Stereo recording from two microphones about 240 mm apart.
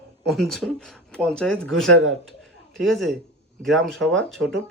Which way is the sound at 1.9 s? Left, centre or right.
Right.